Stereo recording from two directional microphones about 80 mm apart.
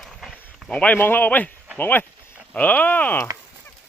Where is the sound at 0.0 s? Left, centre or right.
Centre.